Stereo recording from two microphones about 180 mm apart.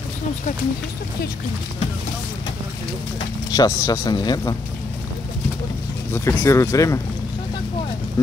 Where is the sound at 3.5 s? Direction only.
20° left (ahead or behind).